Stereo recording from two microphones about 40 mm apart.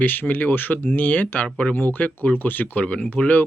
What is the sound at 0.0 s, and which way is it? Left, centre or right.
Speech, left.